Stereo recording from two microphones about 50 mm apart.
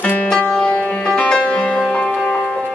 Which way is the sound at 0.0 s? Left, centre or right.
Left.